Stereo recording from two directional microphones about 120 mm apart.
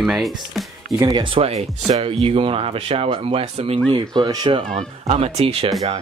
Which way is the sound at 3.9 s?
35° right (ahead or behind).